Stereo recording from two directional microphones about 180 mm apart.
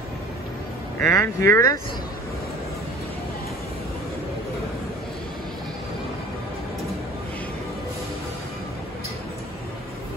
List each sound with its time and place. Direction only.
1.0 s speech: 15° left (ahead or behind)